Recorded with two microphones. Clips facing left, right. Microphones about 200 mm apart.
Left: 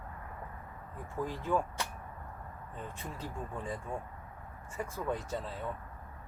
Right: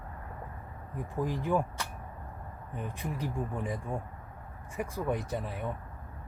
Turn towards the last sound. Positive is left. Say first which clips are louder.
# right 3 dB
turn(degrees=-15)  # may be behind; listen again after turning